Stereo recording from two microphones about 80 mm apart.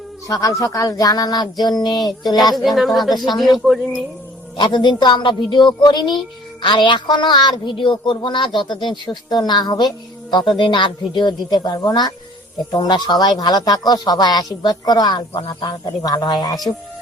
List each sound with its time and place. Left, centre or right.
0.3 s speech: left
2.6 s speech: centre
4.5 s speech: left